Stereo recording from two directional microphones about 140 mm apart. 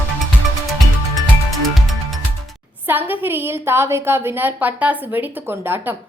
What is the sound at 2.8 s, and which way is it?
A woman's voice, 15° right (ahead or behind).